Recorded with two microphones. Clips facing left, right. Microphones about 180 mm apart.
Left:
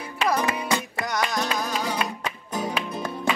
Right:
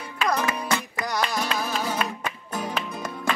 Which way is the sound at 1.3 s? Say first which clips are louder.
Left 1 dB; 5° right (ahead or behind).